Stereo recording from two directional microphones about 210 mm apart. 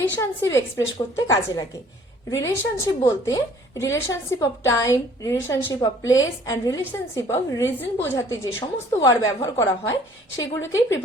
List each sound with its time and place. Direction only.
0.0 s a woman's voice: 10° left (ahead or behind)